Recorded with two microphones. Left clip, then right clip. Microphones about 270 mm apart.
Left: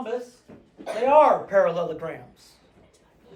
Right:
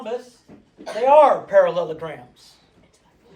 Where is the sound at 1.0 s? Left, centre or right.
Right.